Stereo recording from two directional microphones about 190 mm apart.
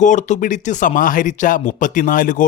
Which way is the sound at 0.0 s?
40° left (ahead or behind).